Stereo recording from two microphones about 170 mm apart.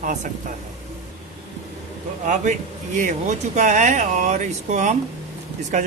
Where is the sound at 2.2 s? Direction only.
45° right (ahead or behind).